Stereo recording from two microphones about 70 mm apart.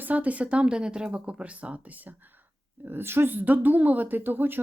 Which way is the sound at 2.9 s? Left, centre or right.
Right.